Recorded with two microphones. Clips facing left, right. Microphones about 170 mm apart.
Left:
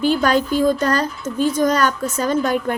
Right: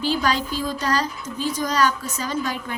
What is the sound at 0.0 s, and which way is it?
A woman's voice, 55° left (ahead or behind).